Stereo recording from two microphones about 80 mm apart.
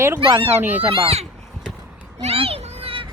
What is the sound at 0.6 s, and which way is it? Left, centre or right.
Speech, right.